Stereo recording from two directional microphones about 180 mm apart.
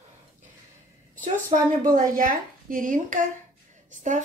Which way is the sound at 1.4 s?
45° right (ahead or behind).